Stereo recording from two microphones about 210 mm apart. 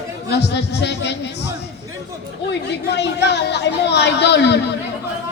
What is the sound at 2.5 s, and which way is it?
Speech, 55° left (ahead or behind).